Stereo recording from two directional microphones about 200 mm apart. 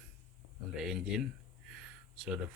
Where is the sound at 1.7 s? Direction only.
5° right (ahead or behind).